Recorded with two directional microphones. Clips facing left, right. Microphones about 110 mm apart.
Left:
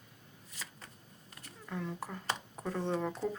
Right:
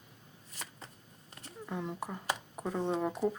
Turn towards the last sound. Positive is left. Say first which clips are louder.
# right 3 dB
turn(degrees=-15)  # may be behind; listen again after turning